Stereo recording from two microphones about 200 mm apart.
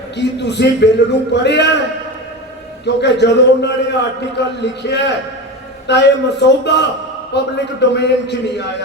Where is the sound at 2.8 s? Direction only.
60° left (ahead or behind).